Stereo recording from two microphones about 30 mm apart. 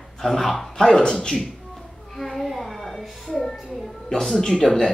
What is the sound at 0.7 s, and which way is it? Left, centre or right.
Speech, centre.